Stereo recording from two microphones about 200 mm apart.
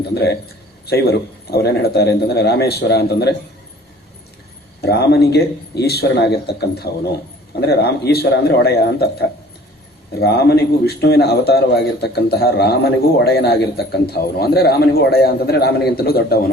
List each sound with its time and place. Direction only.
0.9 s a man's voice: 50° left (ahead or behind)
4.8 s a man's voice: 55° left (ahead or behind)